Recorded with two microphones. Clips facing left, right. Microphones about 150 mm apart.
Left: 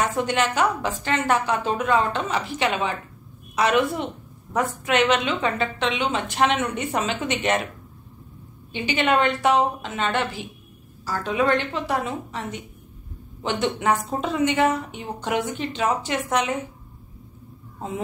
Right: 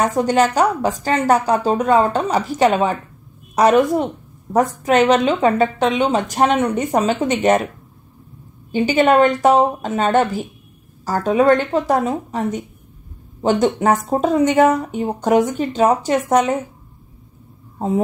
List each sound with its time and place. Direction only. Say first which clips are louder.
0.0 s a woman's voice: right 7 dB; 40° right (ahead or behind)
8.7 s speech: right 8 dB; 40° right (ahead or behind)
17.7 s speech: right 11 dB; 40° right (ahead or behind)